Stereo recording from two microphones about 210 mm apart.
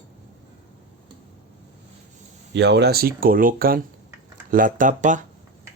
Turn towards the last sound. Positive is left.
turn(degrees=-35)  # may be behind; listen again after turning